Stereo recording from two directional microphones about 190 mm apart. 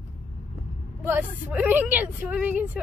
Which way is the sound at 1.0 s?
10° right (ahead or behind).